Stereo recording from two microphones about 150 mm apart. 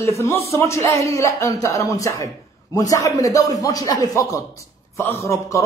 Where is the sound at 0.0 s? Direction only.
20° left (ahead or behind).